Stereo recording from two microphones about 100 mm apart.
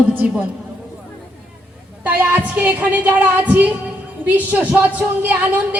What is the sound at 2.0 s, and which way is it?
Speech, 15° right (ahead or behind).